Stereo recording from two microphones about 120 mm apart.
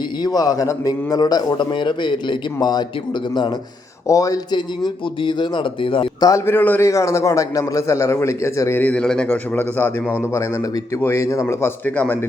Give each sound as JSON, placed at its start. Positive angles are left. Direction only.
{"t": 0.2, "sound": "a man's voice", "side_deg": 30}
{"t": 4.0, "sound": "a man's voice", "side_deg": 30}
{"t": 5.2, "sound": "speech", "side_deg": 40}
{"t": 6.1, "sound": "a man's voice", "side_deg": 30}
{"t": 6.4, "sound": "a man's voice", "side_deg": 15}
{"t": 8.8, "sound": "a man's voice", "side_deg": 10}